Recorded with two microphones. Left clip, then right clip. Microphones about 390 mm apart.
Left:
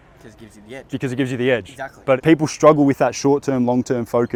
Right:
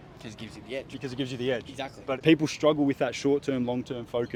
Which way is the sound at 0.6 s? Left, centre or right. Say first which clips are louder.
Left 8 dB; left.